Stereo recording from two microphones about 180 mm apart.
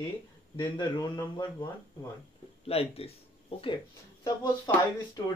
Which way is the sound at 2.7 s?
35° left (ahead or behind).